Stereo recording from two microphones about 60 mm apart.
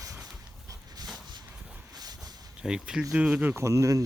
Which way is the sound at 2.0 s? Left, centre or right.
Right.